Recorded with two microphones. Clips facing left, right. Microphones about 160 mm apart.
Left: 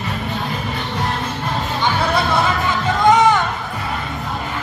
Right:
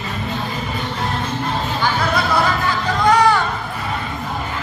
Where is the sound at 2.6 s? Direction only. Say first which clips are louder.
Left 2 dB; 20° left (ahead or behind).